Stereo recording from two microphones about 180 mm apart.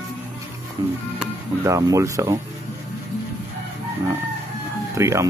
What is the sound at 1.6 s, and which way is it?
Speech, 20° right (ahead or behind).